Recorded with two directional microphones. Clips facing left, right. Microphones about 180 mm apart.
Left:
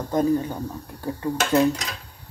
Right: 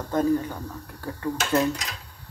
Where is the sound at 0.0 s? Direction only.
15° left (ahead or behind).